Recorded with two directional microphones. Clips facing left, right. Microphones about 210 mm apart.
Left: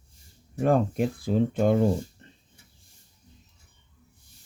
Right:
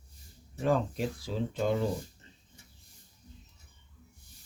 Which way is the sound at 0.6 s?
55° left (ahead or behind).